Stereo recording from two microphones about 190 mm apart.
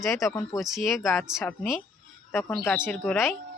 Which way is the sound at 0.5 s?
Centre (ahead or behind).